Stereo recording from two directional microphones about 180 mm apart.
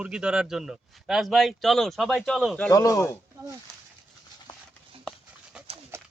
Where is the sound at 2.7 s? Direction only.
15° left (ahead or behind).